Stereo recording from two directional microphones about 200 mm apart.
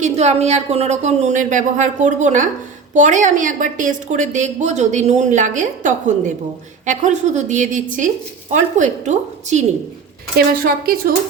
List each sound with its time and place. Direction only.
0.0 s a woman's voice: 35° right (ahead or behind)
10.3 s speech: 50° right (ahead or behind)